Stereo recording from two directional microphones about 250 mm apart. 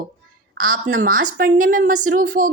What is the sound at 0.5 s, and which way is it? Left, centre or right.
A woman's voice, right.